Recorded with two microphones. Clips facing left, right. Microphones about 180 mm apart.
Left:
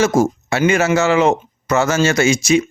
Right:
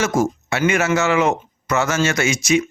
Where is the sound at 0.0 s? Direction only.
30° left (ahead or behind).